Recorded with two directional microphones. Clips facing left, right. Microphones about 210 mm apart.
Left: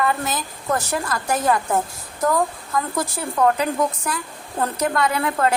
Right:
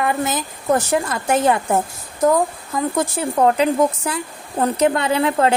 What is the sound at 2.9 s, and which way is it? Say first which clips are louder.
A woman's voice: right 6 dB; 25° right (ahead or behind).